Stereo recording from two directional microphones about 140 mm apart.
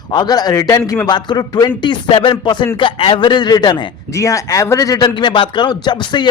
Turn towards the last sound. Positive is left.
turn(degrees=35)  # may be behind; listen again after turning